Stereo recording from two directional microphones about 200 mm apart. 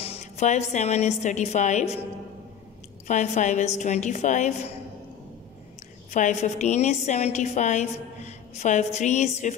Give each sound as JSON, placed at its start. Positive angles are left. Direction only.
{"t": 0.0, "sound": "a woman's voice", "side_deg": 30}
{"t": 3.1, "sound": "a woman's voice", "side_deg": 35}
{"t": 6.1, "sound": "a woman's voice", "side_deg": 35}